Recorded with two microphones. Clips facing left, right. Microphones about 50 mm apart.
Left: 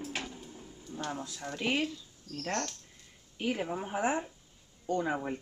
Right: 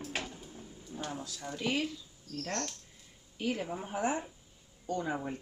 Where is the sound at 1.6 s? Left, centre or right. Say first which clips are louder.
Left 2 dB; left.